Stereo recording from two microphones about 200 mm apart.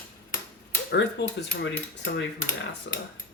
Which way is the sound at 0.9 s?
60° left (ahead or behind).